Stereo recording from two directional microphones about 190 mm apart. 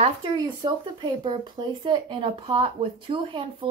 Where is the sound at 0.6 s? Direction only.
25° right (ahead or behind).